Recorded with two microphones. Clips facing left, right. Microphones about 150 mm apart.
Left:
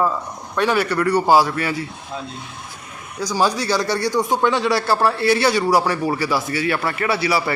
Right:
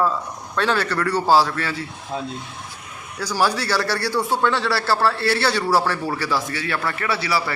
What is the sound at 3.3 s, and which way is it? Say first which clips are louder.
A man's voice: left 2 dB; 15° left (ahead or behind).